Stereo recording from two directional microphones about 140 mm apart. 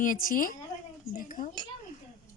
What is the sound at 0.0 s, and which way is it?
A woman's voice, 75° left (ahead or behind).